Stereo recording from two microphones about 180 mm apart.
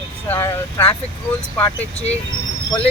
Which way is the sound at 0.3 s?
15° left (ahead or behind).